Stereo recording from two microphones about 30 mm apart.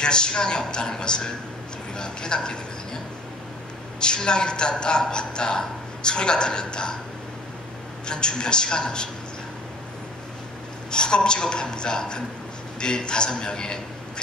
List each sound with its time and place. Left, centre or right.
0.0 s a man's voice: left
4.0 s a man's voice: left
8.1 s a man's voice: left
10.9 s a man's voice: left